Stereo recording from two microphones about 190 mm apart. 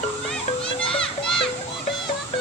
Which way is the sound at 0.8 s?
30° left (ahead or behind).